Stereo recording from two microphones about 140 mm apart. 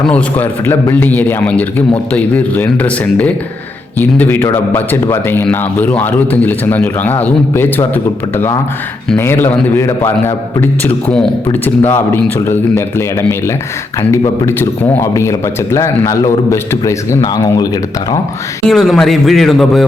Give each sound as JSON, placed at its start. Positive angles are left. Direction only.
{"t": 0.0, "sound": "a man's voice", "side_deg": 10}
{"t": 9.1, "sound": "a man's voice", "side_deg": 15}
{"t": 14.1, "sound": "a man's voice", "side_deg": 15}
{"t": 18.7, "sound": "a man's voice", "side_deg": 0}